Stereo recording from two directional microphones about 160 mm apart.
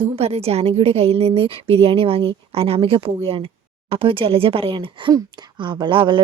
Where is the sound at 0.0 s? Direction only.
40° right (ahead or behind).